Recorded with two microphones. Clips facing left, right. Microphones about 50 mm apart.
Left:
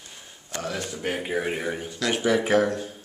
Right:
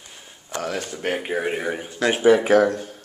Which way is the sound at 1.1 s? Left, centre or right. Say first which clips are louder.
Right 3 dB; centre.